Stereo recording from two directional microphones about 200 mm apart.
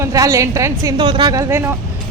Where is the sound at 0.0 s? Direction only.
15° right (ahead or behind).